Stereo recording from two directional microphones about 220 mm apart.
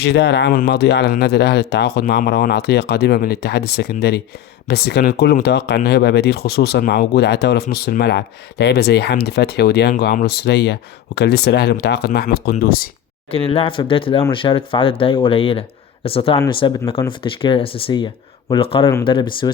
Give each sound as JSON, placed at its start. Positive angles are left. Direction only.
{"t": 0.0, "sound": "speech", "side_deg": 50}
{"t": 13.3, "sound": "speech", "side_deg": 25}